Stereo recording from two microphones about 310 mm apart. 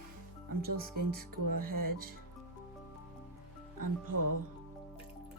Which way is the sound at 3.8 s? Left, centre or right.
Right.